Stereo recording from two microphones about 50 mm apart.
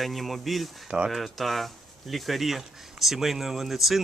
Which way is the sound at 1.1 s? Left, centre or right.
Centre.